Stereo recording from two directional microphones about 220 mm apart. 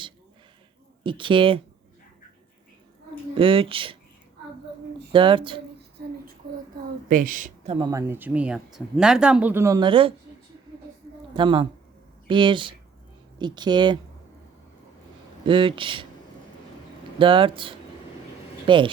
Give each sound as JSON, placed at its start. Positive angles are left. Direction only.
{"t": 1.0, "sound": "speech", "side_deg": -20}
{"t": 3.3, "sound": "speech", "side_deg": -25}
{"t": 5.1, "sound": "speech", "side_deg": -25}
{"t": 6.0, "sound": "child singing", "side_deg": -45}
{"t": 7.1, "sound": "speech", "side_deg": -40}
{"t": 7.9, "sound": "speech", "side_deg": -10}
{"t": 11.3, "sound": "speech", "side_deg": -20}
{"t": 15.4, "sound": "speech", "side_deg": -20}
{"t": 17.2, "sound": "speech", "side_deg": -25}